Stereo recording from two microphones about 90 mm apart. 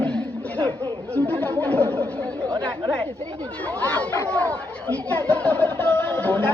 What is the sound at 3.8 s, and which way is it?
Speech, 20° left (ahead or behind).